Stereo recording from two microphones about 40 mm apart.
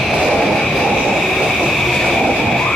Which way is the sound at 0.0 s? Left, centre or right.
Centre.